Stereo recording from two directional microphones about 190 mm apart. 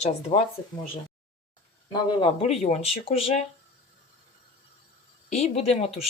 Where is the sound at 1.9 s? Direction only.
30° left (ahead or behind).